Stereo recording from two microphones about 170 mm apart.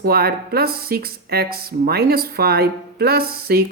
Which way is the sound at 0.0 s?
65° right (ahead or behind).